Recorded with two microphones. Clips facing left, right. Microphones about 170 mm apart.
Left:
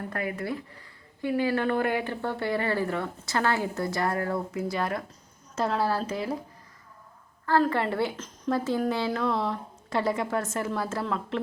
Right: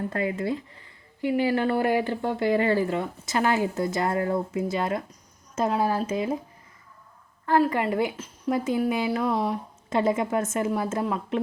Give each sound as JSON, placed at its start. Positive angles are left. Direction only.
{"t": 0.1, "sound": "speech", "side_deg": -25}
{"t": 1.9, "sound": "speech", "side_deg": -35}
{"t": 2.2, "sound": "speech", "side_deg": -15}
{"t": 7.4, "sound": "a woman's voice", "side_deg": -15}